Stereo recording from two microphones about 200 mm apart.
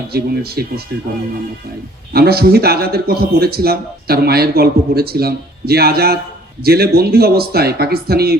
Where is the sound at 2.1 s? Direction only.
50° right (ahead or behind).